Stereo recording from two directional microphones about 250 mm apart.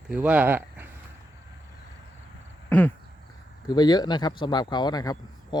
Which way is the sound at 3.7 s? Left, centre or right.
Centre.